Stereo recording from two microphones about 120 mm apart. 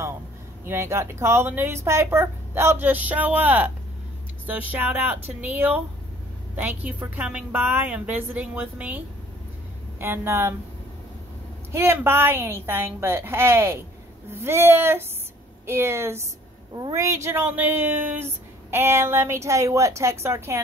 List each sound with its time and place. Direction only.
0.7 s a woman's voice: 20° right (ahead or behind)
11.7 s speech: 20° right (ahead or behind)